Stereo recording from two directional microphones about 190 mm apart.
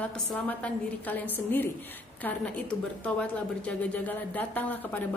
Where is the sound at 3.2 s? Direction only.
5° left (ahead or behind).